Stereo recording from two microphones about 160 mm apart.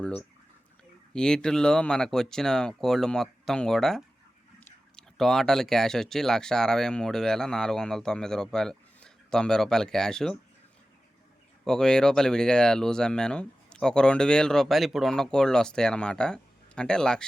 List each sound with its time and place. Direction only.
0.0 s speech: 5° left (ahead or behind)
11.6 s speech: 5° left (ahead or behind)